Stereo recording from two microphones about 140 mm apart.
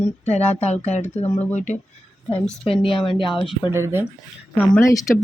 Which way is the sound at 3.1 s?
35° left (ahead or behind).